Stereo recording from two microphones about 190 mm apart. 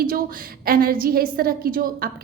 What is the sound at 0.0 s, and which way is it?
A woman's voice, 50° right (ahead or behind).